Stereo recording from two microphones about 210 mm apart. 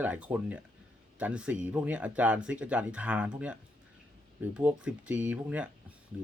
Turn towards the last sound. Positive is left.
turn(degrees=-5)  # may be behind; listen again after turning